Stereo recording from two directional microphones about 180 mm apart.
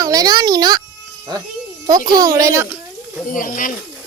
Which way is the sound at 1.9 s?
20° right (ahead or behind).